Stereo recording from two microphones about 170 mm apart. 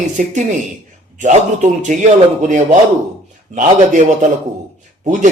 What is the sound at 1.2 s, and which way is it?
A man's voice, 45° right (ahead or behind).